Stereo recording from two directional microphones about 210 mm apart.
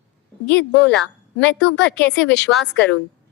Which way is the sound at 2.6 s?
55° left (ahead or behind).